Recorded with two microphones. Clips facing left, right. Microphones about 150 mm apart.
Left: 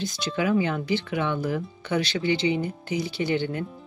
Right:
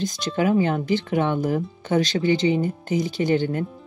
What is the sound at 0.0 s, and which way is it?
Speech, 45° right (ahead or behind).